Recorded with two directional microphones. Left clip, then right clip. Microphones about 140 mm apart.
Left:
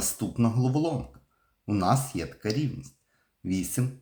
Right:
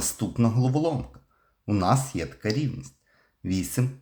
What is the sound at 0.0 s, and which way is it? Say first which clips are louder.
Speech: right 2 dB; 25° right (ahead or behind).